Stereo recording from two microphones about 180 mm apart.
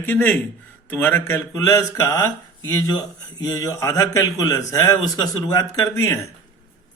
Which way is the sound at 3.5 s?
20° left (ahead or behind).